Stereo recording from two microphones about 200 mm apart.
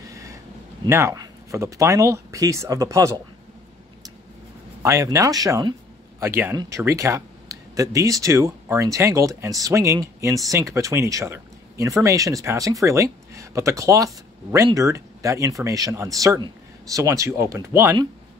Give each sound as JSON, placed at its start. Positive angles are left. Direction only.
{"t": 0.1, "sound": "a sound", "side_deg": -15}
{"t": 0.8, "sound": "speech", "side_deg": -15}
{"t": 4.8, "sound": "speech", "side_deg": -15}